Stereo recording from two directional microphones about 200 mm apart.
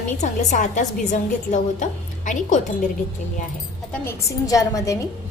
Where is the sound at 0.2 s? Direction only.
40° left (ahead or behind).